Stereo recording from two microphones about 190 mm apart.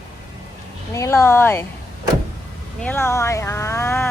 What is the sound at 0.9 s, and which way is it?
Speech, 15° left (ahead or behind).